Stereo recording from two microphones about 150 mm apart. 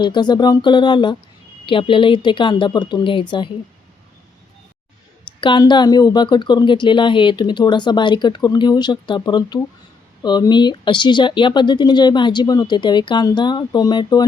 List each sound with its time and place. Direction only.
0.0 s speech: 30° left (ahead or behind)
5.4 s speech: 30° left (ahead or behind)